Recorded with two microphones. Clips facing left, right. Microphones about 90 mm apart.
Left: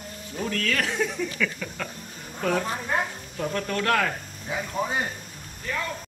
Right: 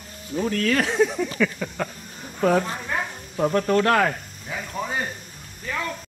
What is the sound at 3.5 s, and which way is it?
Speech, 35° right (ahead or behind).